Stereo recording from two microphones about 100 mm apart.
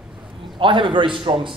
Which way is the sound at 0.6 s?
55° right (ahead or behind).